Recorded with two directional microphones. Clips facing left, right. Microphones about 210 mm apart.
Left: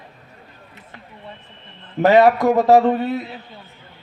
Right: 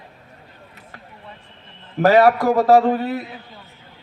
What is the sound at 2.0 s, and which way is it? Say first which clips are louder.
A man's voice: left 1 dB; 20° left (ahead or behind).